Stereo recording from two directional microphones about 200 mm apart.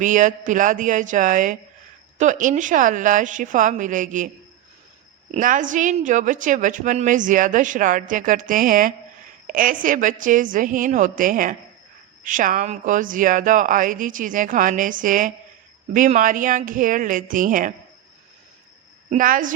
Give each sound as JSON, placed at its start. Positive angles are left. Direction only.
{"t": 0.0, "sound": "a woman's voice", "side_deg": -40}
{"t": 5.3, "sound": "a woman's voice", "side_deg": -40}
{"t": 19.1, "sound": "a woman's voice", "side_deg": -40}